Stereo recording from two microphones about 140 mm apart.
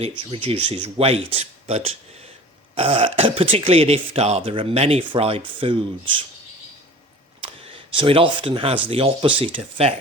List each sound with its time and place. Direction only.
0.2 s speech: 40° right (ahead or behind)
7.4 s speech: 40° right (ahead or behind)